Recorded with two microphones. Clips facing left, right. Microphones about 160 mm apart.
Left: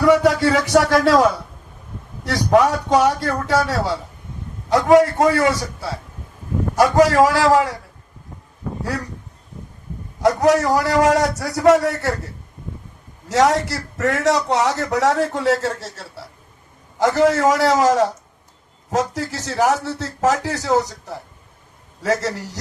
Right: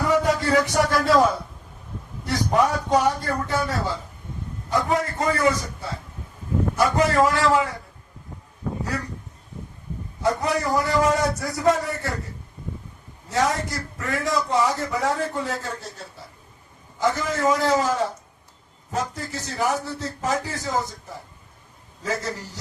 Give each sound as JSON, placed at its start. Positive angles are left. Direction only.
{"t": 0.0, "sound": "a man's voice", "side_deg": 90}
{"t": 10.2, "sound": "a man's voice", "side_deg": 80}